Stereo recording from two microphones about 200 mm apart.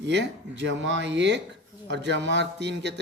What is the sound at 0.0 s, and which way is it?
Speech, 60° right (ahead or behind).